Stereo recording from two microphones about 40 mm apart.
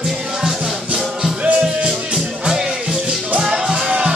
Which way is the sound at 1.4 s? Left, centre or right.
Right.